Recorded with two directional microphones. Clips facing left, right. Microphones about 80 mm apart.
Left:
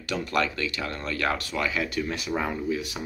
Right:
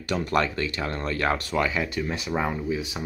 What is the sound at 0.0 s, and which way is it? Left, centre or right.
Speech, right.